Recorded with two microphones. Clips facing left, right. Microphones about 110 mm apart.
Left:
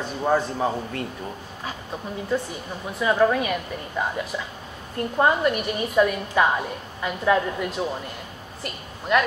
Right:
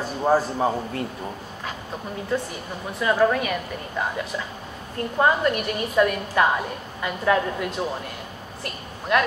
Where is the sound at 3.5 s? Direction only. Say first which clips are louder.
Even; 10° left (ahead or behind).